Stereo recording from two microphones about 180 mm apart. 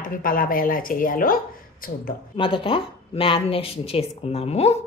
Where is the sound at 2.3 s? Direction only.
30° left (ahead or behind).